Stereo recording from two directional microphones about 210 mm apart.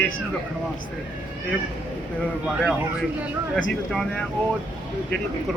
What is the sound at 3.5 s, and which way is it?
Speech, 5° left (ahead or behind).